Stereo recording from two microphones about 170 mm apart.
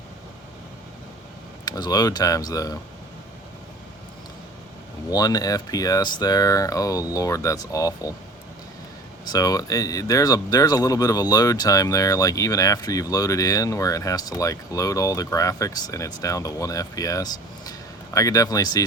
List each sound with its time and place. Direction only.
1.6 s speech: 25° left (ahead or behind)
5.0 s speech: 20° left (ahead or behind)
9.3 s speech: 20° left (ahead or behind)